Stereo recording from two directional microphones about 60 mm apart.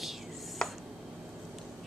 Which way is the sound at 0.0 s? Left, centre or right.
Centre.